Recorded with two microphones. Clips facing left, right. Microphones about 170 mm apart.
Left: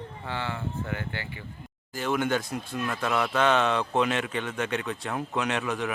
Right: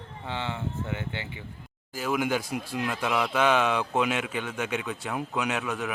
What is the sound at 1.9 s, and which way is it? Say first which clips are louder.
A man's voice: left 1 dB; 5° right (ahead or behind).